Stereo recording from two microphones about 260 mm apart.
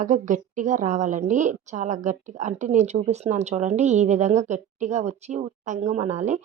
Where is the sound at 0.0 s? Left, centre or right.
Right.